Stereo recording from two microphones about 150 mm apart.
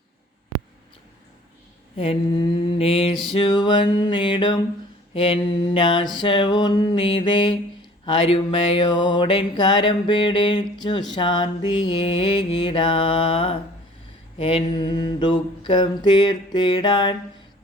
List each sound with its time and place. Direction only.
2.0 s music: 35° left (ahead or behind)